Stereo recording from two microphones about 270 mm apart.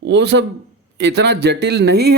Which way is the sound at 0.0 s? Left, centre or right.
Right.